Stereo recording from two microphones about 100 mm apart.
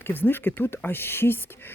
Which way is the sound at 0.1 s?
20° left (ahead or behind).